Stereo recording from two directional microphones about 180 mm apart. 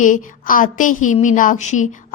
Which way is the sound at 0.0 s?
45° left (ahead or behind).